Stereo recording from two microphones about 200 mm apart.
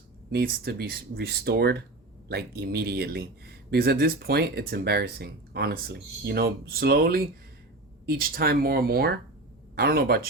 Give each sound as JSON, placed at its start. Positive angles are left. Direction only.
{"t": 0.3, "sound": "speech", "side_deg": -50}